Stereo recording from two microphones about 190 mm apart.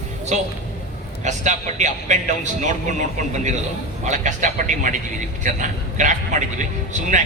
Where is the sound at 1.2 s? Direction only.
40° right (ahead or behind).